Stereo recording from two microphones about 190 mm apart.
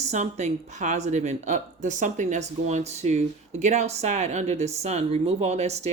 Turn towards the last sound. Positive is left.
turn(degrees=-35)  # may be behind; listen again after turning